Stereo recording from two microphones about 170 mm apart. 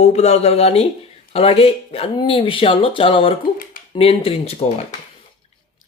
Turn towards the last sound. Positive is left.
turn(degrees=35)  # may be behind; listen again after turning